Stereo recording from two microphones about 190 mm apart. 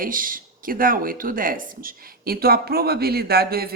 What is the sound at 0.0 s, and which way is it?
Speech, 45° right (ahead or behind).